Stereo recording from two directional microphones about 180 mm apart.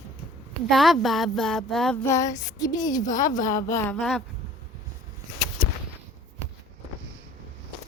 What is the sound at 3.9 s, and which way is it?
Speech, centre (ahead or behind).